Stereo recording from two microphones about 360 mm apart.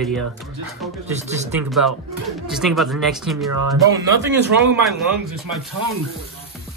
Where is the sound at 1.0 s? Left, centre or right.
Centre.